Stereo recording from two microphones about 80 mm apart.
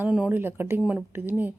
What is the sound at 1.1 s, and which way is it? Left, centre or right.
Speech, right.